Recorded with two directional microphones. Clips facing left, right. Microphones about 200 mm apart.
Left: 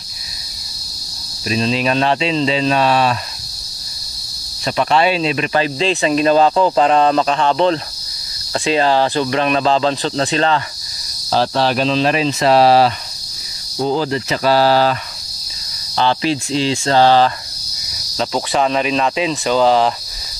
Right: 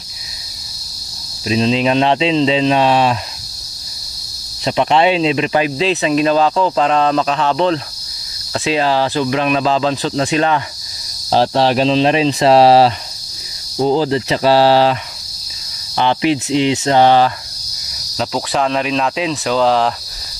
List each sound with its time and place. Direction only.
1.5 s speech: 20° right (ahead or behind)
4.6 s speech: 20° right (ahead or behind)
5.8 s speech: 5° right (ahead or behind)
11.2 s speech: 30° right (ahead or behind)
16.0 s speech: 15° right (ahead or behind)
18.1 s speech: centre (ahead or behind)